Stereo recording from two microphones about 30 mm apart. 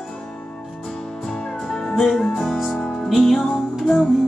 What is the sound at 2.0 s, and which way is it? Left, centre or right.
Music, centre.